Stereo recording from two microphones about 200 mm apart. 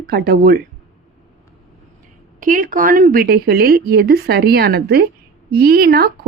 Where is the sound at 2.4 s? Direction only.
40° right (ahead or behind).